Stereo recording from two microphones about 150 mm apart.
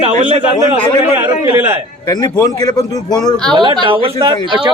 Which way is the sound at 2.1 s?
25° left (ahead or behind).